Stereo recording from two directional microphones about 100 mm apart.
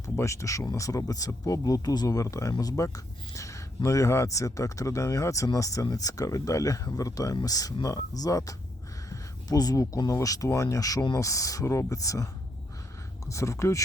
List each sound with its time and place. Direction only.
0.2 s speech: 30° left (ahead or behind)
9.0 s a sound: 40° left (ahead or behind)
10.0 s speech: 35° left (ahead or behind)